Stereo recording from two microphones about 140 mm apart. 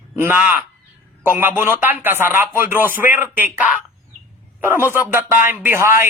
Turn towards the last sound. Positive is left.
turn(degrees=-15)  # may be behind; listen again after turning